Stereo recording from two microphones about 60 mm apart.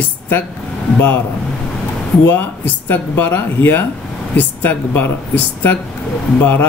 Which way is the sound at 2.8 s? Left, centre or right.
Left.